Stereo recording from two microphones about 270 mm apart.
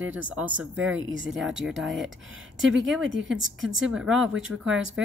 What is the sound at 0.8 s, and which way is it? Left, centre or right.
Speech, right.